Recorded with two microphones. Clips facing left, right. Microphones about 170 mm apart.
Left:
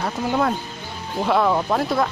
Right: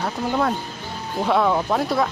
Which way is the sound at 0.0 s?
Centre (ahead or behind).